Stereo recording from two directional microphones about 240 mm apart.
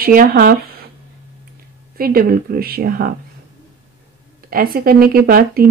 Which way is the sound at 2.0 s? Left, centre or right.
Right.